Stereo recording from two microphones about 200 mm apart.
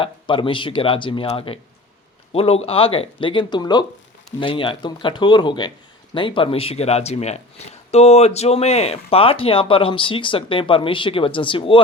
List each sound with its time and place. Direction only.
0.0 s speech: 25° left (ahead or behind)